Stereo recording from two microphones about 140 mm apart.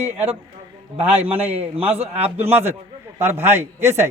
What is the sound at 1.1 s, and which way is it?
A man's voice, 45° right (ahead or behind).